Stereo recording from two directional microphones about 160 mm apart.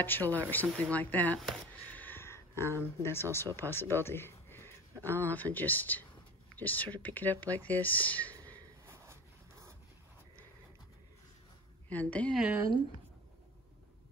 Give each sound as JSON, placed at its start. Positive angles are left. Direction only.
{"t": 0.0, "sound": "speech", "side_deg": 10}
{"t": 1.9, "sound": "a sound", "side_deg": 10}
{"t": 3.0, "sound": "speech", "side_deg": 15}
{"t": 8.8, "sound": "a sound", "side_deg": -15}
{"t": 11.9, "sound": "speech", "side_deg": 10}
{"t": 12.4, "sound": "speech", "side_deg": -10}